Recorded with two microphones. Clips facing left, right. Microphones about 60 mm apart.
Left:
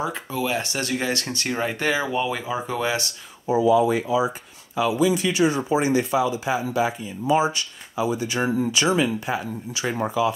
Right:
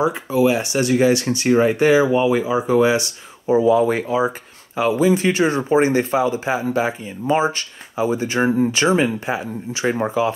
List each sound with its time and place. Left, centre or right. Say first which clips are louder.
0.0 s speech: right 9 dB; centre
3.4 s speech: right 3 dB; right